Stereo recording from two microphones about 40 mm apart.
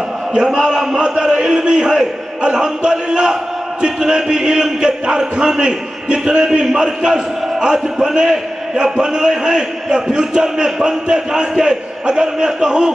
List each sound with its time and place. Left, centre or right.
0.3 s a man's voice: centre